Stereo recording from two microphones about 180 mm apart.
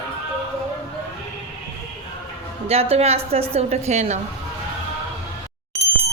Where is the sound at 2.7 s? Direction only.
35° right (ahead or behind).